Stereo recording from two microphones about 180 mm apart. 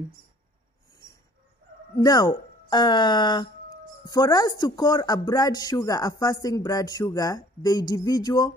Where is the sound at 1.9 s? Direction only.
20° left (ahead or behind).